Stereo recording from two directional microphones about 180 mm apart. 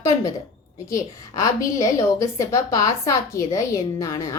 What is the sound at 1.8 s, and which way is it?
A woman's voice, 20° left (ahead or behind).